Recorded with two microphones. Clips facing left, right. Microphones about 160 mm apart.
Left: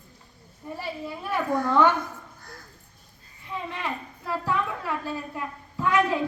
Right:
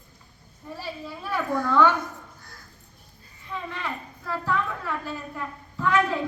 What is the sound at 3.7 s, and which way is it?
A woman's voice, 20° left (ahead or behind).